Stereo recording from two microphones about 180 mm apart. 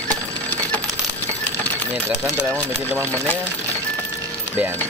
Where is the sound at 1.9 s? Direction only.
5° left (ahead or behind).